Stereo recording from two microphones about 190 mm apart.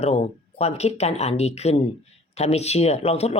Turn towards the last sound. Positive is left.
turn(degrees=30)  # may be behind; listen again after turning